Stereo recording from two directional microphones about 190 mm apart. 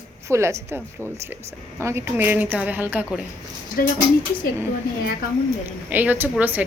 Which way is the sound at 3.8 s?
50° left (ahead or behind).